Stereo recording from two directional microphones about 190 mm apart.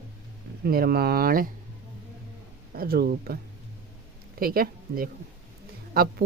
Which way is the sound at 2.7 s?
50° right (ahead or behind).